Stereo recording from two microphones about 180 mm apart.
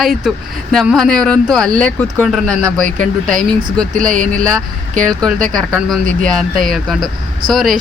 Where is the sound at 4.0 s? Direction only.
50° right (ahead or behind).